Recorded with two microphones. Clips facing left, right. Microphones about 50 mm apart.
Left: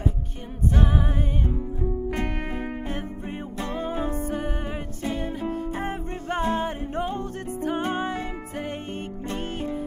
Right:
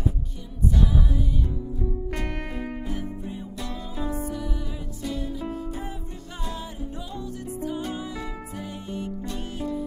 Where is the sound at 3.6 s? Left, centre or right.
Left.